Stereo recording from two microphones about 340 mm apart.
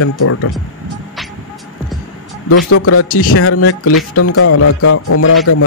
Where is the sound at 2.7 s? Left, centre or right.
Left.